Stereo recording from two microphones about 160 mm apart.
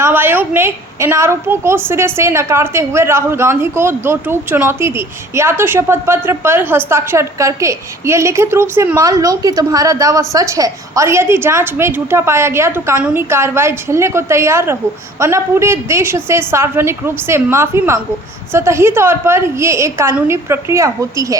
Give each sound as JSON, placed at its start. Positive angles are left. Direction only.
{"t": 0.0, "sound": "a woman's voice", "side_deg": -15}